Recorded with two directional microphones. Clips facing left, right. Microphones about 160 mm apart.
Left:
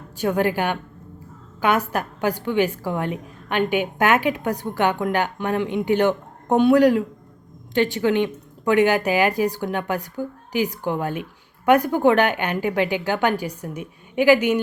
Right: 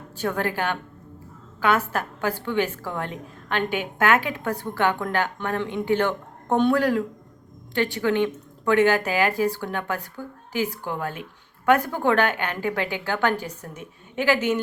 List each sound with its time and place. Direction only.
0.2 s a woman's voice: 15° left (ahead or behind)